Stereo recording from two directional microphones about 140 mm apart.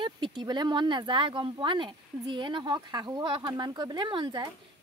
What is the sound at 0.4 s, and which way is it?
Speech, 30° right (ahead or behind).